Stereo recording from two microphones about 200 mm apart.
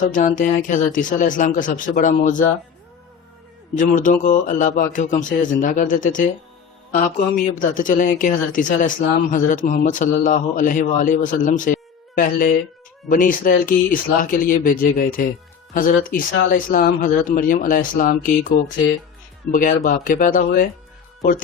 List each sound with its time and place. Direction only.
0.0 s speech: 40° left (ahead or behind)
3.8 s speech: 40° left (ahead or behind)